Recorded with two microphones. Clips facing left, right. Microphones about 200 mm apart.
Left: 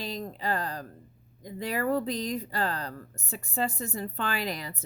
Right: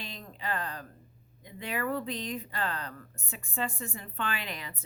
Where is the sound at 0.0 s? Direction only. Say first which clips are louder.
Left 7 dB; 40° left (ahead or behind).